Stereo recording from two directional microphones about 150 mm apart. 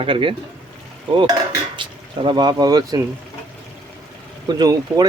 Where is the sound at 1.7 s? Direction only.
30° right (ahead or behind).